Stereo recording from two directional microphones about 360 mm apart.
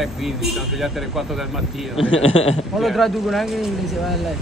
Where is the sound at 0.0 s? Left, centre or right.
Centre.